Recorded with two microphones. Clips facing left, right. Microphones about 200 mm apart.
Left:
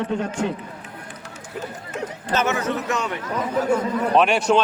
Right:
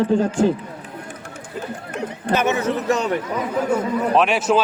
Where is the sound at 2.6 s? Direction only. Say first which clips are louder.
Right 4 dB; 35° right (ahead or behind).